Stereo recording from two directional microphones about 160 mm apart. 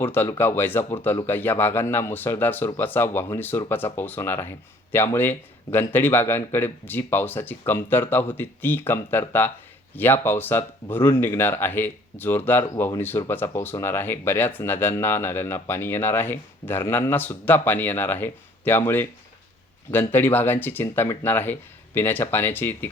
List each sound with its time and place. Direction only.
0.0 s speech: 10° left (ahead or behind)